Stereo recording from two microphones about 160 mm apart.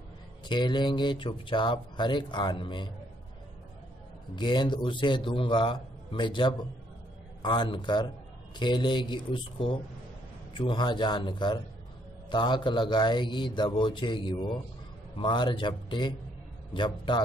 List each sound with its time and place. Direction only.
0.5 s speech: 30° left (ahead or behind)
4.4 s a man's voice: 30° left (ahead or behind)